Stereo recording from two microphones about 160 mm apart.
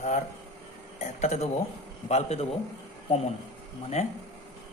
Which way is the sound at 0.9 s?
45° left (ahead or behind).